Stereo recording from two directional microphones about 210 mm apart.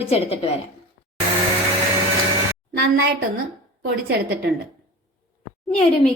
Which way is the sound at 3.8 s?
55° right (ahead or behind).